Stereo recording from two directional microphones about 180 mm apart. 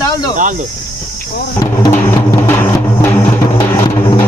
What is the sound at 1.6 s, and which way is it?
Music, 20° left (ahead or behind).